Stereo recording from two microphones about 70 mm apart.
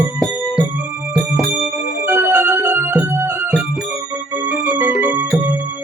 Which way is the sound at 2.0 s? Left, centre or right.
Right.